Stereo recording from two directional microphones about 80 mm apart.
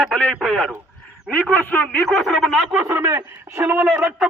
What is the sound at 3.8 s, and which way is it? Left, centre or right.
Speech, centre.